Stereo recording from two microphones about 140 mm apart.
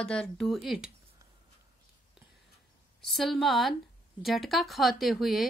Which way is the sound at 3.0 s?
Centre (ahead or behind).